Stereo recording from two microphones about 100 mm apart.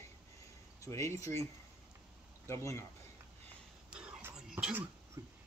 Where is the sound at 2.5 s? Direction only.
25° left (ahead or behind).